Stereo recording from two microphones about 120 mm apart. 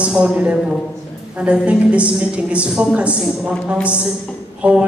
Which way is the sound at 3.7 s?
15° left (ahead or behind).